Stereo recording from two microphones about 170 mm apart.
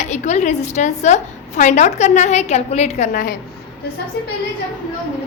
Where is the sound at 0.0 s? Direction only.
45° left (ahead or behind).